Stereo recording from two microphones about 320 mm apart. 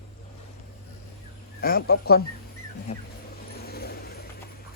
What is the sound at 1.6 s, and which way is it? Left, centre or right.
Speech, left.